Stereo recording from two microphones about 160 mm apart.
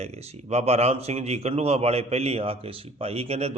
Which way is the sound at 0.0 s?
40° right (ahead or behind).